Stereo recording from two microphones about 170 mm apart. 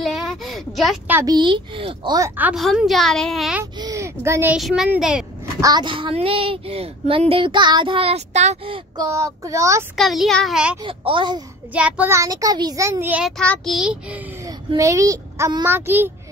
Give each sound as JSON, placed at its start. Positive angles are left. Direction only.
{"t": 0.0, "sound": "a sound", "side_deg": 0}
{"t": 1.2, "sound": "speech", "side_deg": -25}
{"t": 2.1, "sound": "a child's voice", "side_deg": -15}
{"t": 3.7, "sound": "a sound", "side_deg": -20}
{"t": 4.6, "sound": "a child's voice", "side_deg": 0}
{"t": 5.6, "sound": "speech", "side_deg": -25}
{"t": 9.0, "sound": "a child's voice", "side_deg": -15}
{"t": 9.9, "sound": "a child's voice", "side_deg": 0}
{"t": 10.8, "sound": "speech", "side_deg": -30}
{"t": 11.7, "sound": "a child's voice", "side_deg": -10}
{"t": 13.4, "sound": "a child's voice", "side_deg": 5}
{"t": 14.4, "sound": "speech", "side_deg": -20}